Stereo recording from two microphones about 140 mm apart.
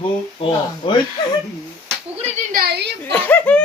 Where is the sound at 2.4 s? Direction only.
75° right (ahead or behind).